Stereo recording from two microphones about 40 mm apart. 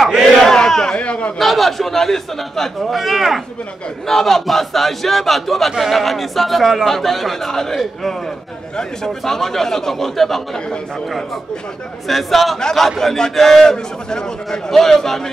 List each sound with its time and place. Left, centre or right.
0.0 s battle cry: centre
0.9 s a sound: left
1.4 s a man's voice: centre
4.1 s a man's voice: centre
12.1 s a man's voice: centre